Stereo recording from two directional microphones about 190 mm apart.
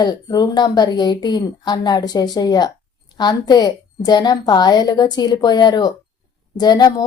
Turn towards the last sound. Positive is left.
turn(degrees=20)  # may be behind; listen again after turning